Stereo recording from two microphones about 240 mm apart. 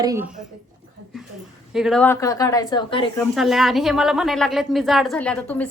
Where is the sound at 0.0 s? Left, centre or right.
Centre.